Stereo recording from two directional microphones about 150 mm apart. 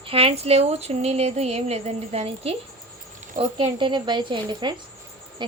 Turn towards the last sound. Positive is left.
turn(degrees=-30)  # may be behind; listen again after turning